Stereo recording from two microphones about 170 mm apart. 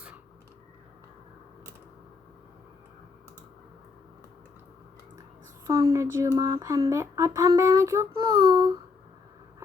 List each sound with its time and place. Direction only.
5.6 s speech: 20° right (ahead or behind)